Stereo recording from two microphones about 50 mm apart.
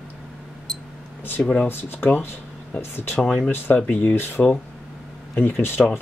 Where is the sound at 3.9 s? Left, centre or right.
Left.